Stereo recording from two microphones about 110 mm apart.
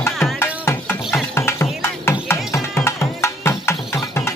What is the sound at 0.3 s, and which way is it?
Music, 20° left (ahead or behind).